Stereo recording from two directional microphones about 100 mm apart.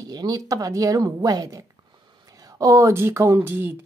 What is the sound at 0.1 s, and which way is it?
A woman's voice, 40° right (ahead or behind).